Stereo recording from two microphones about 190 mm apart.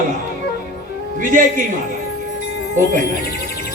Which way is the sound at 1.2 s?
45° right (ahead or behind).